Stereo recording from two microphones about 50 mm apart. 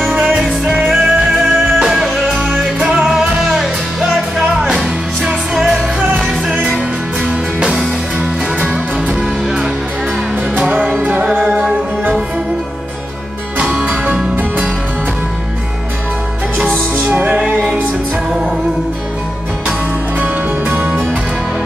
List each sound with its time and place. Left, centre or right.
0.2 s music: centre
4.6 s music: centre
10.6 s music: right
16.9 s music: right
20.2 s music: right